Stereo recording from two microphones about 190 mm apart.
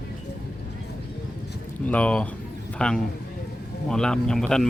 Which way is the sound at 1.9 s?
5° left (ahead or behind).